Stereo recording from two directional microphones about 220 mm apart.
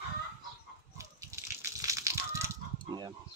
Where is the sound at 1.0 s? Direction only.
15° right (ahead or behind).